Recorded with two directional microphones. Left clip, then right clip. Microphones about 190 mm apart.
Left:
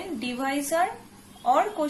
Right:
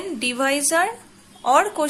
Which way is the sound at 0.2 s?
30° right (ahead or behind).